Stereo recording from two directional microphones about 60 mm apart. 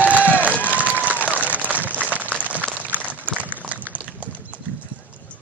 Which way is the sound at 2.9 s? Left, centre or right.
Right.